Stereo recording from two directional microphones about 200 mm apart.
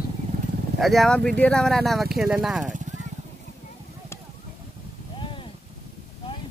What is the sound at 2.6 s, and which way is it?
Speech, 40° right (ahead or behind).